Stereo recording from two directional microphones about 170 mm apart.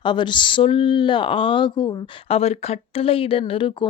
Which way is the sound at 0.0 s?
25° left (ahead or behind).